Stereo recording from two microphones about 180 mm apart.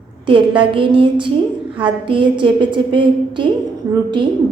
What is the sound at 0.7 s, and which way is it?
A woman's voice, 30° right (ahead or behind).